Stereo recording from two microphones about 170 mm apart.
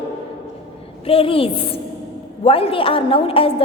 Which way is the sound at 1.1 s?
35° left (ahead or behind).